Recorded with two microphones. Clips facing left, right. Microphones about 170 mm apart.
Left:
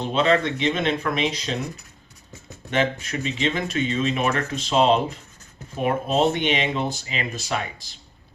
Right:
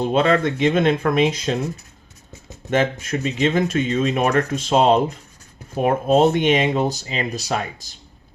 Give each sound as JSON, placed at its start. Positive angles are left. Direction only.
{"t": 0.0, "sound": "speech", "side_deg": -50}
{"t": 2.6, "sound": "speech", "side_deg": -45}